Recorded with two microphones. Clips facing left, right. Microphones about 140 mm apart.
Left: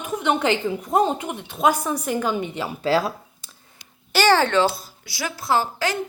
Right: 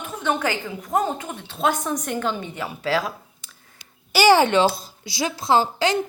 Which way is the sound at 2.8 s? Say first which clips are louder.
Left 3 dB; 35° left (ahead or behind).